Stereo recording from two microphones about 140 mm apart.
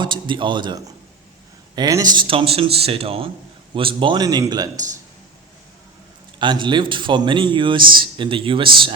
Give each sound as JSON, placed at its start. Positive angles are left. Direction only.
{"t": 0.0, "sound": "a man's voice", "side_deg": -35}
{"t": 6.4, "sound": "a man's voice", "side_deg": -35}